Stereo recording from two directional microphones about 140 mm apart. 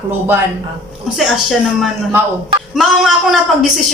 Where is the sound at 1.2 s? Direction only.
Centre (ahead or behind).